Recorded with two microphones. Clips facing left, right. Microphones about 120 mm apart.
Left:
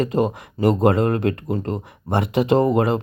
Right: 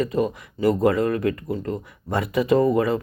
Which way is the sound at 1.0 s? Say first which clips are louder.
Left 2 dB; 65° left (ahead or behind).